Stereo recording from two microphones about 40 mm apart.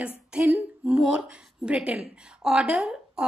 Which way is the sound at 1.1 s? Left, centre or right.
Right.